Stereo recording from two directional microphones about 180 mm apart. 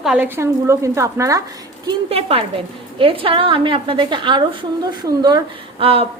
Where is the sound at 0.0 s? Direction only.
5° right (ahead or behind).